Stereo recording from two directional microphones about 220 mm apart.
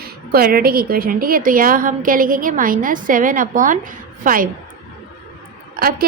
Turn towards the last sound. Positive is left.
turn(degrees=-40)  # may be behind; listen again after turning